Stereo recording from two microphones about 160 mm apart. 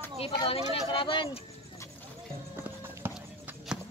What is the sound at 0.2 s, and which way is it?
Speech, 35° left (ahead or behind).